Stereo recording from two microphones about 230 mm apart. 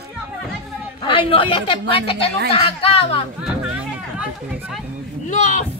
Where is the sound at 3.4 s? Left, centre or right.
Centre.